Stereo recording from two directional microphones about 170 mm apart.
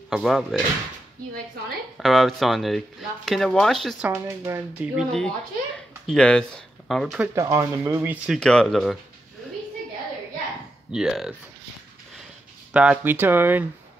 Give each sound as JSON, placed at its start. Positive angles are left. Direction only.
{"t": 0.1, "sound": "speech", "side_deg": 0}
{"t": 2.0, "sound": "speech", "side_deg": 0}
{"t": 4.1, "sound": "speech", "side_deg": -15}
{"t": 4.9, "sound": "speech", "side_deg": 5}
{"t": 7.3, "sound": "speech", "side_deg": -20}
{"t": 8.4, "sound": "speech", "side_deg": 5}
{"t": 10.9, "sound": "speech", "side_deg": -5}
{"t": 12.7, "sound": "speech", "side_deg": -5}